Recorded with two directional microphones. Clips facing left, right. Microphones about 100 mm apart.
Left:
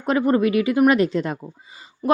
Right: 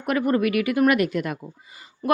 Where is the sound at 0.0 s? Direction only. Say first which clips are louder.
Left 3 dB; 25° left (ahead or behind).